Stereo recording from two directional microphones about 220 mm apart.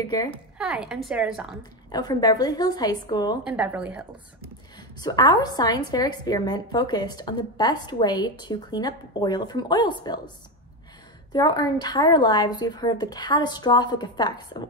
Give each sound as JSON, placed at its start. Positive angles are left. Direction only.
{"t": 0.0, "sound": "a woman's voice", "side_deg": 20}
{"t": 0.6, "sound": "a woman's voice", "side_deg": -5}
{"t": 1.9, "sound": "a woman's voice", "side_deg": 20}
{"t": 3.4, "sound": "a woman's voice", "side_deg": -5}
{"t": 4.7, "sound": "a woman's voice", "side_deg": 20}
{"t": 11.3, "sound": "a woman's voice", "side_deg": 20}